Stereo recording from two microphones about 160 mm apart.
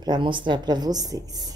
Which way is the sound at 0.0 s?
30° right (ahead or behind).